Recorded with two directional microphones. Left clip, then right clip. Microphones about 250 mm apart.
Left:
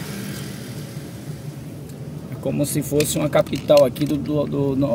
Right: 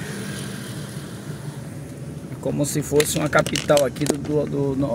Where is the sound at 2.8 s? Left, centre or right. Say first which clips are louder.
Left 1 dB; centre.